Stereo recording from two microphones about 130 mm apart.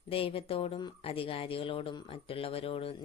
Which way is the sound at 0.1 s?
45° left (ahead or behind).